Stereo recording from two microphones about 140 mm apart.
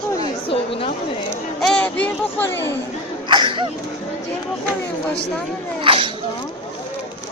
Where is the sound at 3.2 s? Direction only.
35° right (ahead or behind).